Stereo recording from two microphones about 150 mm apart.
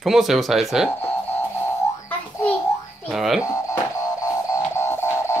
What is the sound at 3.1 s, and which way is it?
Speech, 5° right (ahead or behind).